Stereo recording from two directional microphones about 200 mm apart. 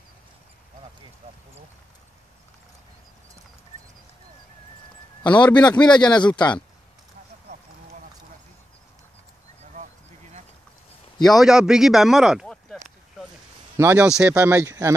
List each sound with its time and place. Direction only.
5.2 s speech: 20° left (ahead or behind)
9.8 s a sound: 35° right (ahead or behind)
11.2 s speech: centre (ahead or behind)
13.7 s speech: 10° right (ahead or behind)